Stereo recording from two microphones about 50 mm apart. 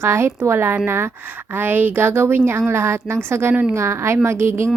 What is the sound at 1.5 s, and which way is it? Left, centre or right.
Speech, right.